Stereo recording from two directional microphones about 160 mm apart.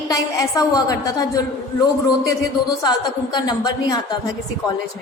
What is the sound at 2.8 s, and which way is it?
A woman's voice, 25° left (ahead or behind).